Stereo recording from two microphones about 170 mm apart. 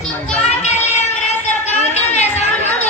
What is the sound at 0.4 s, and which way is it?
Child singing, 40° left (ahead or behind).